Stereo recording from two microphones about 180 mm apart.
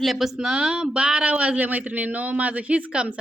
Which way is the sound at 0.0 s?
Centre (ahead or behind).